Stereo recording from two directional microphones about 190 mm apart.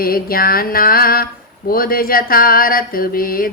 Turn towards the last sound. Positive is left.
turn(degrees=50)  # may be behind; listen again after turning